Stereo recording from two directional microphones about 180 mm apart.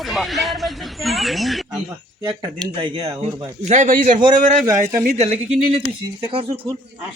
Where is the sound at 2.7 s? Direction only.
30° right (ahead or behind).